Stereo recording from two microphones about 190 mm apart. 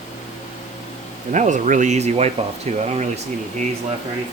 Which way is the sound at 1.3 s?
40° right (ahead or behind).